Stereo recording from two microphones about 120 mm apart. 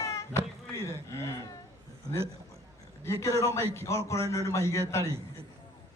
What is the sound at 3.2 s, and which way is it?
A man's voice, 25° left (ahead or behind).